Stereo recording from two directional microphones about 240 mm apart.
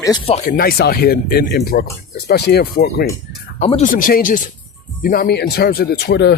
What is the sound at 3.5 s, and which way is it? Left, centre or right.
Speech, left.